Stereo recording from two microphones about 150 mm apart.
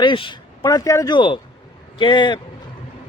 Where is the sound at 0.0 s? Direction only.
35° left (ahead or behind).